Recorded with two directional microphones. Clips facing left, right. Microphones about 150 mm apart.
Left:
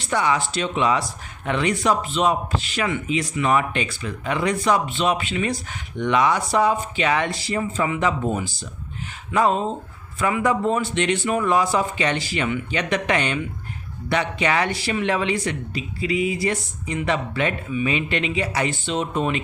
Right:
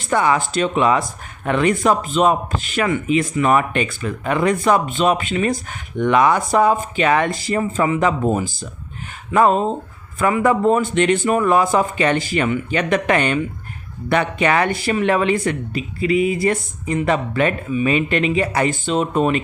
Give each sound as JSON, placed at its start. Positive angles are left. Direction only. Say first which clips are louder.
{"t": 0.0, "sound": "speech", "louder": "right 4 dB", "side_deg": -50}